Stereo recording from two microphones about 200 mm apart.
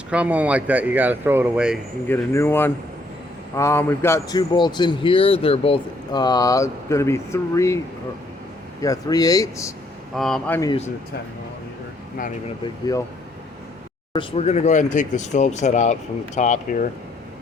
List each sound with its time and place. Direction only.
0.1 s speech: 5° right (ahead or behind)
2.0 s a man's voice: 10° left (ahead or behind)
8.8 s speech: 20° left (ahead or behind)
10.2 s speech: 5° left (ahead or behind)
14.1 s speech: 25° left (ahead or behind)